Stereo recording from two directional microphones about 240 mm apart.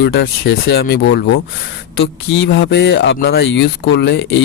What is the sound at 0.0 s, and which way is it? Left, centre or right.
Speech, left.